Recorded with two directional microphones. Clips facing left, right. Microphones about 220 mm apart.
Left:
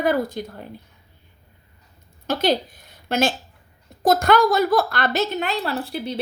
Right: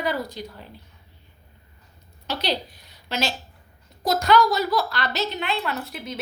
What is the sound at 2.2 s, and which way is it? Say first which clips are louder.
A woman's voice: left 7 dB; 50° left (ahead or behind).